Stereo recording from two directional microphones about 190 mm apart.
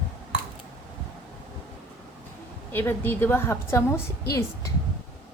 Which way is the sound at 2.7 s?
10° left (ahead or behind).